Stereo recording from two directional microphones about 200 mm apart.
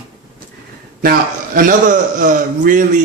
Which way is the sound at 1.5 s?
40° right (ahead or behind).